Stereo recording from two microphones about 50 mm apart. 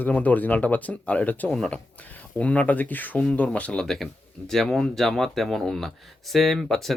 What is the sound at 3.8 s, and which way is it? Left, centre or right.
Speech, centre.